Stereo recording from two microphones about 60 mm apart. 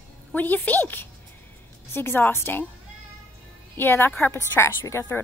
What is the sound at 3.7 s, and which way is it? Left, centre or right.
A woman's voice, left.